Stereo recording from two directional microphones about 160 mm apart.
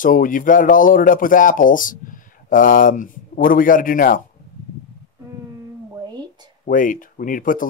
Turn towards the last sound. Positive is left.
turn(degrees=60)  # may be behind; listen again after turning